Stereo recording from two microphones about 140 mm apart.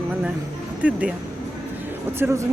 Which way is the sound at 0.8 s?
10° right (ahead or behind).